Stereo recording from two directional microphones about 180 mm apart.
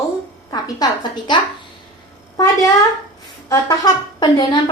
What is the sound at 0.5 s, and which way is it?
Speech, 25° left (ahead or behind).